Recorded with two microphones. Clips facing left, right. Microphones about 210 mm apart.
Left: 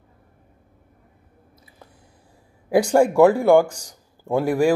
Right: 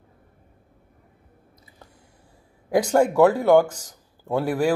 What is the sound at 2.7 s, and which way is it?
A man's voice, 10° left (ahead or behind).